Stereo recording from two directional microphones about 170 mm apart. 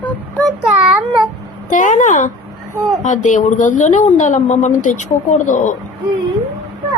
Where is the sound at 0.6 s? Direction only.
Centre (ahead or behind).